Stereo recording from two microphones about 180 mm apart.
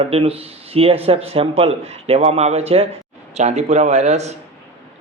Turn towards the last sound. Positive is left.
turn(degrees=-40)  # may be behind; listen again after turning